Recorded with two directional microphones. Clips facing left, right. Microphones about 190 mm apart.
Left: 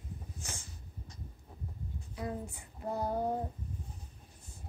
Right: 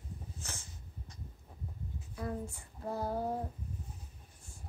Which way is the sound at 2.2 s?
15° left (ahead or behind).